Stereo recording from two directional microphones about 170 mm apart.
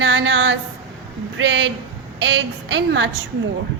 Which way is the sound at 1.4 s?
90° right.